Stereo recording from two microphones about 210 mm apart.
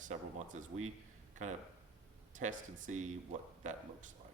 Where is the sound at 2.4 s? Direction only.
35° right (ahead or behind).